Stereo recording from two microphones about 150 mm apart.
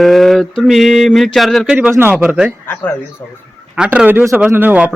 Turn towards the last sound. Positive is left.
turn(degrees=-10)  # may be behind; listen again after turning